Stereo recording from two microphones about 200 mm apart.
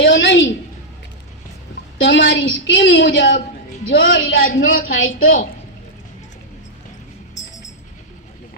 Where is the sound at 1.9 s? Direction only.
65° left (ahead or behind); by 4.6 s 50° left (ahead or behind).